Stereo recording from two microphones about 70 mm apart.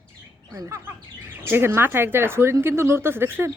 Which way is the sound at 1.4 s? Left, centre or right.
Right.